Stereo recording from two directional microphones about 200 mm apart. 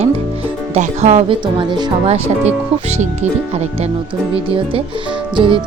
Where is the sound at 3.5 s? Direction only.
30° right (ahead or behind).